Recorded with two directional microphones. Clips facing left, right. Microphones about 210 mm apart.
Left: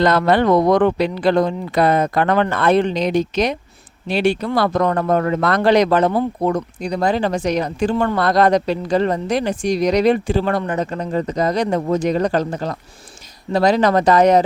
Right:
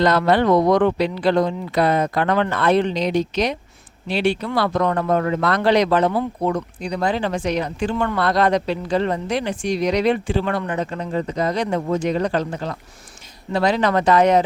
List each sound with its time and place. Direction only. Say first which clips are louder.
0.0 s speech: left 2 dB; 50° left (ahead or behind)